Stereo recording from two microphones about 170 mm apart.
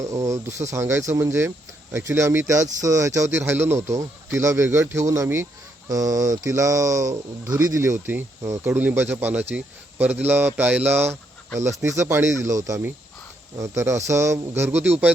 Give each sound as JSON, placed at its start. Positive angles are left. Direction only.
{"t": 0.0, "sound": "speech", "side_deg": -20}